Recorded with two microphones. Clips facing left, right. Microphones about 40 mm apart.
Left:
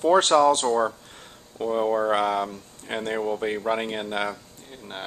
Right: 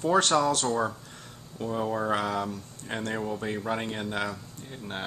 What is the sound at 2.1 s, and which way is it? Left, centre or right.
Speech, left.